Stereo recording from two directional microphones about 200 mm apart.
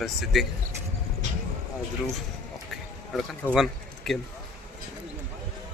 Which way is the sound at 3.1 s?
Centre (ahead or behind).